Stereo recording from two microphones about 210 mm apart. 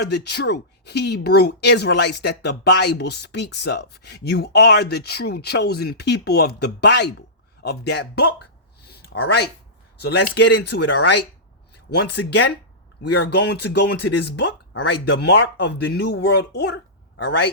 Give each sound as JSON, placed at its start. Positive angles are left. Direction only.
{"t": 0.0, "sound": "speech", "side_deg": 50}
{"t": 8.9, "sound": "a sound", "side_deg": 50}
{"t": 10.0, "sound": "speech", "side_deg": 55}